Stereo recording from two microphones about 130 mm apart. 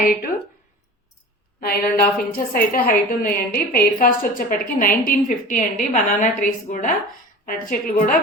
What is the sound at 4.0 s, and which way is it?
A woman's voice, 90° left.